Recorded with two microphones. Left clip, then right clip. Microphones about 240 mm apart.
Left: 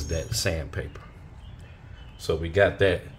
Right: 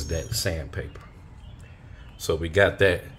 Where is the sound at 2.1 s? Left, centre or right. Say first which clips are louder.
Right 1 dB; centre.